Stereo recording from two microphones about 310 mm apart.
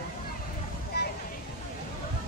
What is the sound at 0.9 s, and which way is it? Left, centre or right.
Vehicle, left.